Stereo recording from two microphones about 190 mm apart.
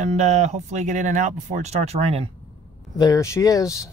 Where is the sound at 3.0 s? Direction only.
15° left (ahead or behind).